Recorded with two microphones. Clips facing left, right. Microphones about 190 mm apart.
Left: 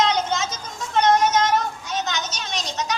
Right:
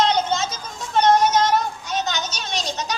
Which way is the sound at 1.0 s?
35° right (ahead or behind).